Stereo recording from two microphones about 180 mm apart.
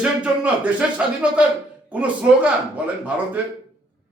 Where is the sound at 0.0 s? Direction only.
5° right (ahead or behind).